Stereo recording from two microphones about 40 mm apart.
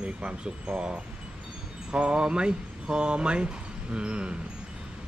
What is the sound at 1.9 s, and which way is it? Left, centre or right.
Speech, right.